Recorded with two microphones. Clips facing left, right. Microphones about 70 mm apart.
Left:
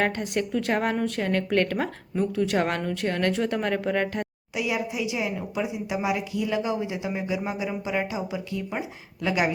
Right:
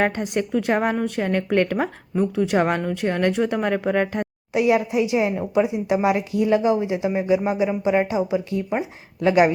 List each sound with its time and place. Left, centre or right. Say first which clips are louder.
0.0 s a woman's voice: right 4 dB; centre
4.5 s a woman's voice: right 9 dB; right